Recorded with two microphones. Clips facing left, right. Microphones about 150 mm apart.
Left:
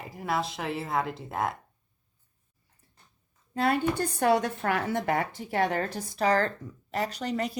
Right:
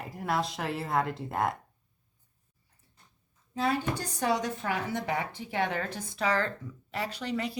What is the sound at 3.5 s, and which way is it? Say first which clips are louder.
Speech: left 4 dB; 60° left (ahead or behind).